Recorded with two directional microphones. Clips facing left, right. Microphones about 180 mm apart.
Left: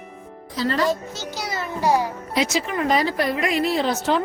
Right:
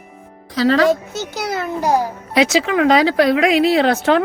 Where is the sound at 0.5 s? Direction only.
90° right.